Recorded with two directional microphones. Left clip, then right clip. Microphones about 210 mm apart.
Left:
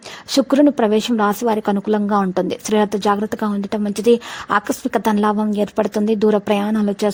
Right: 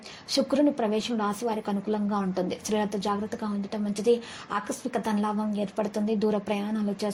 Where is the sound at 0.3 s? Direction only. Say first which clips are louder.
Left 10 dB; 45° left (ahead or behind).